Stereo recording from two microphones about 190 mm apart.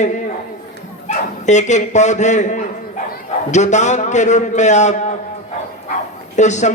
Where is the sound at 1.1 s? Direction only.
40° left (ahead or behind).